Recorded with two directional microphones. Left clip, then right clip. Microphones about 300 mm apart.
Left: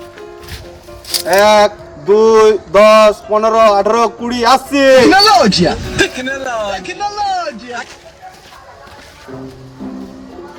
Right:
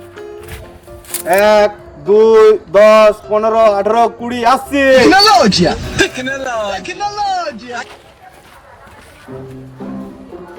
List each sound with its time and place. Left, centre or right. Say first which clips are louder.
1.0 s speech: left 1 dB; centre